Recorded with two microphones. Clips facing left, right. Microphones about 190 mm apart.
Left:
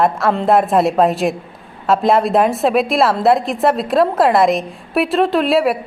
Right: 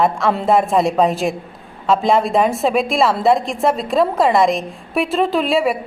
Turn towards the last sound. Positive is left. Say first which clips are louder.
# left 2 dB
turn(degrees=0)  # may be behind; listen again after turning